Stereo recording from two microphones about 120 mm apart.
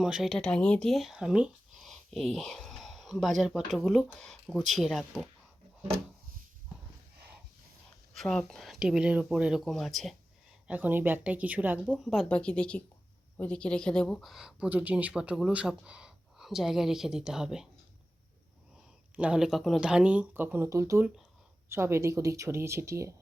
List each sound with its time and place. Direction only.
0.0 s speech: 5° right (ahead or behind)
8.1 s speech: 5° left (ahead or behind)
10.7 s speech: 15° right (ahead or behind)
11.9 s speech: centre (ahead or behind)
19.1 s speech: 10° right (ahead or behind); by 23.1 s 25° right (ahead or behind)